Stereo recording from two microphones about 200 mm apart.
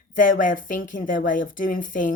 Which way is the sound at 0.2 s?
40° left (ahead or behind).